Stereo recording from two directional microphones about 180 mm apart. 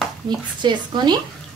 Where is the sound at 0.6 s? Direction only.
25° right (ahead or behind).